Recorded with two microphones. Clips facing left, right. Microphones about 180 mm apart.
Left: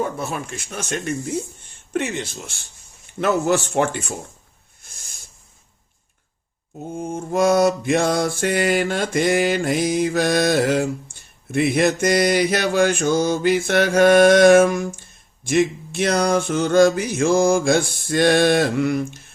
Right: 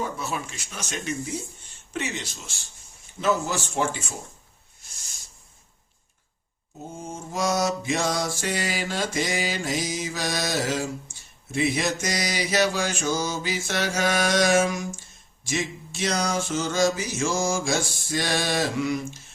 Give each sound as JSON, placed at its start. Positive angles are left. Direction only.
{"t": 0.0, "sound": "mantra", "side_deg": 55}
{"t": 4.8, "sound": "a sound", "side_deg": 55}
{"t": 6.9, "sound": "mantra", "side_deg": 55}